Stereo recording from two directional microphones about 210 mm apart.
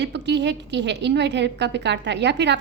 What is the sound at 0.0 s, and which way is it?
A woman's voice, 55° right (ahead or behind).